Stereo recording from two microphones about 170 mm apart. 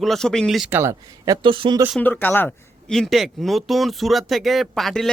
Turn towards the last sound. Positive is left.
turn(degrees=0)  # may be behind; listen again after turning